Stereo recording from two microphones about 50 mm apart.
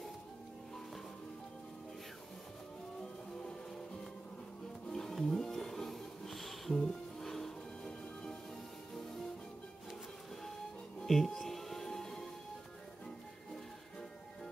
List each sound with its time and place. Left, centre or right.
4.8 s music: centre
6.8 s music: centre
7.2 s music: centre
7.8 s music: centre
11.1 s music: centre